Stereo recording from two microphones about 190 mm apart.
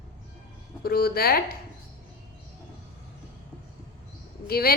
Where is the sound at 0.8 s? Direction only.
55° left (ahead or behind).